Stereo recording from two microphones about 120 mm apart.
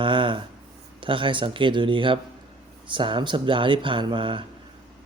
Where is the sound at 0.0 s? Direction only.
45° right (ahead or behind).